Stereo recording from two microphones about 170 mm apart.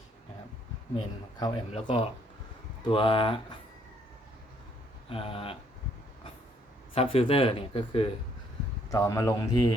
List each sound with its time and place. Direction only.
0.9 s speech: 25° left (ahead or behind)
5.0 s speech: 35° left (ahead or behind)
6.9 s speech: 35° left (ahead or behind)
8.9 s speech: 20° left (ahead or behind)